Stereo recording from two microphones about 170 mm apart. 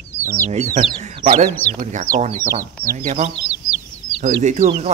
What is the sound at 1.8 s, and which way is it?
Speech, 50° right (ahead or behind).